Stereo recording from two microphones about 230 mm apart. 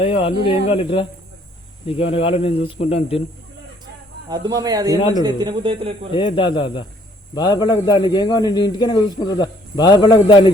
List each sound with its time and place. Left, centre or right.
0.0 s a man's voice: left
4.3 s a man's voice: centre
6.1 s a man's voice: left